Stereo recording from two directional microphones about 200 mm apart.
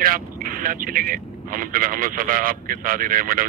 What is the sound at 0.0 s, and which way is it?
Speech, 45° right (ahead or behind).